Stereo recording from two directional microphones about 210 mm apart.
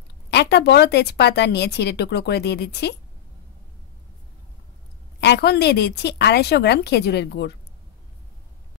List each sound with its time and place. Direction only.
0.3 s speech: 50° left (ahead or behind)
5.2 s speech: 55° left (ahead or behind)